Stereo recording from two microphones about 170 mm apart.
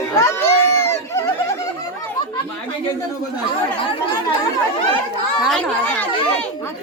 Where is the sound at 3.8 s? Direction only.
30° left (ahead or behind).